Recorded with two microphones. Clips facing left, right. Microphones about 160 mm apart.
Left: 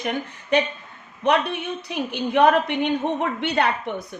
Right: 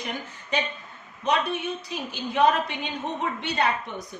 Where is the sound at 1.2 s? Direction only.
65° left (ahead or behind).